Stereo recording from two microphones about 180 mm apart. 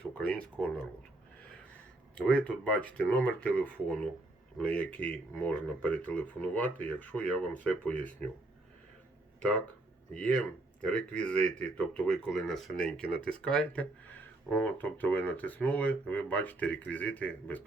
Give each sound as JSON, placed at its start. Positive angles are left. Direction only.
{"t": 0.0, "sound": "speech", "side_deg": 5}
{"t": 2.1, "sound": "speech", "side_deg": 5}
{"t": 10.2, "sound": "speech", "side_deg": 5}